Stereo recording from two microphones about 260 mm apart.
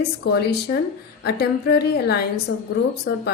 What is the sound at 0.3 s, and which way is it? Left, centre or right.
A woman's voice, left.